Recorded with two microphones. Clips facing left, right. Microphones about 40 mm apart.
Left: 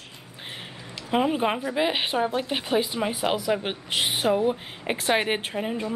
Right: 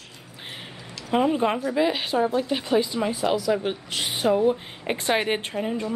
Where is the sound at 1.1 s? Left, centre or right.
Centre.